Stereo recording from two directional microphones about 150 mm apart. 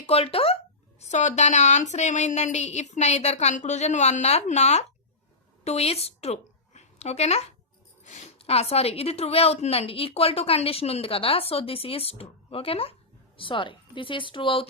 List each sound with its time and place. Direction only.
0.1 s a woman's voice: 40° left (ahead or behind)